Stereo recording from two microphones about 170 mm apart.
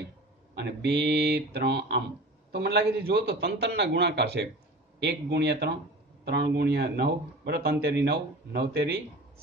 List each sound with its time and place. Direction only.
0.6 s a man's voice: 85° right